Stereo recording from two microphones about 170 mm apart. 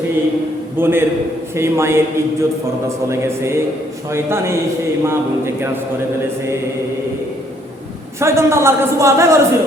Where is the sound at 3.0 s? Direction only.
15° right (ahead or behind).